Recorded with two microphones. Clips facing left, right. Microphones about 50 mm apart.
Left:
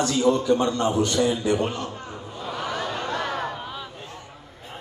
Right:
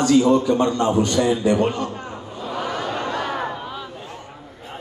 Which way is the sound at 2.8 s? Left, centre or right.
Right.